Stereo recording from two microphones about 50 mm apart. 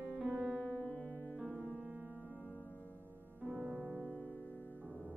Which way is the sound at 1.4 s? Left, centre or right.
Right.